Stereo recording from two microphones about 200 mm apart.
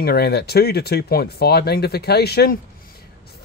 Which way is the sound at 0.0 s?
55° left (ahead or behind).